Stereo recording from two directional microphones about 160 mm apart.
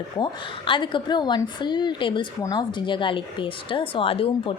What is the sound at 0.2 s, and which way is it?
A woman's voice, 30° left (ahead or behind).